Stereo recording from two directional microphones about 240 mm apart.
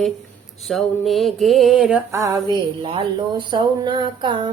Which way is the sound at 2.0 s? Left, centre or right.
Centre.